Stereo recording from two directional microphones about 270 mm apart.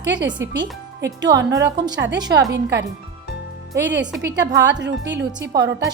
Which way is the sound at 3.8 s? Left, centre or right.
Right.